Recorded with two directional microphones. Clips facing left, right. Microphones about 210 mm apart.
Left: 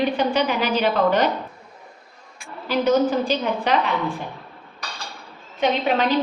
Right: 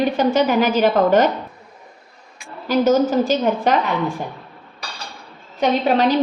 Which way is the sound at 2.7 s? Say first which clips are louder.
Right 3 dB; 45° right (ahead or behind).